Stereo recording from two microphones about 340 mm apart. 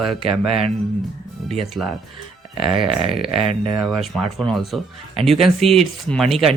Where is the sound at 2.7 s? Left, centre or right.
Centre.